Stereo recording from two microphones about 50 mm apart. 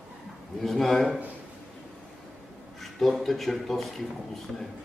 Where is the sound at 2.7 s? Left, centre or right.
Centre.